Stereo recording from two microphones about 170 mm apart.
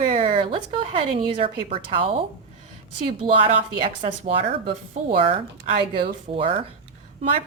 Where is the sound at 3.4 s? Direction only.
35° right (ahead or behind).